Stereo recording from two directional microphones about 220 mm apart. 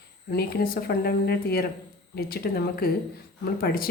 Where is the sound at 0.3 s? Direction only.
45° left (ahead or behind).